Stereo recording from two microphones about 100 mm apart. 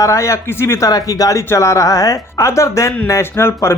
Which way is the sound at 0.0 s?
30° left (ahead or behind).